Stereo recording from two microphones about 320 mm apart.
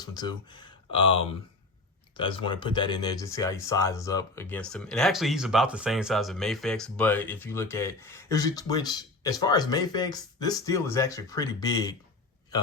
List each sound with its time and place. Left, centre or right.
0.1 s speech: centre